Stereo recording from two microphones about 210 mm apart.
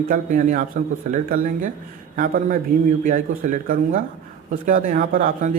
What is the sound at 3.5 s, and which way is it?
Speech, 40° right (ahead or behind).